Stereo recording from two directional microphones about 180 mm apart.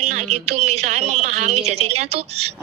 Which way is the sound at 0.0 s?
35° right (ahead or behind).